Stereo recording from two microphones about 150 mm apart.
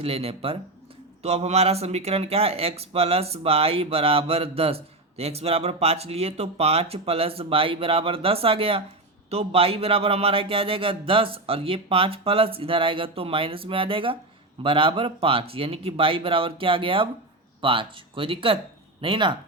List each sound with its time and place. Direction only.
0.0 s speech: 40° right (ahead or behind)